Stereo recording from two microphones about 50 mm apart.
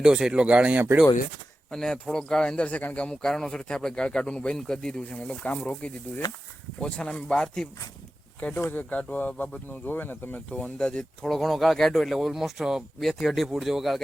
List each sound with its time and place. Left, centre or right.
0.0 s speech: centre
1.7 s speech: centre
3.2 s speech: centre
5.1 s speech: left; by 7.7 s centre
8.4 s speech: left
10.3 s speech: left
11.3 s speech: centre